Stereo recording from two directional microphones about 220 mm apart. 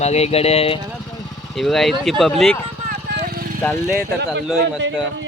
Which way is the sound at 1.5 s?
Centre (ahead or behind).